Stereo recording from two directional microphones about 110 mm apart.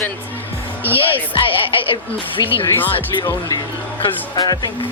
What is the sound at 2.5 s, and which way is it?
Speech, 55° left (ahead or behind).